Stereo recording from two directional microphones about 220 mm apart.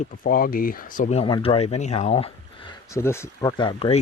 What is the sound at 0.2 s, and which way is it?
Speech, 40° left (ahead or behind).